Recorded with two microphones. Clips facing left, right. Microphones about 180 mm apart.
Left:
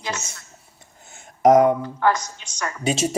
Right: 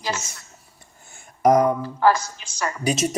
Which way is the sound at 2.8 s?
25° left (ahead or behind).